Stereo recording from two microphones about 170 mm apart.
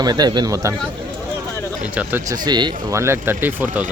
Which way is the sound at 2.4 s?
25° right (ahead or behind).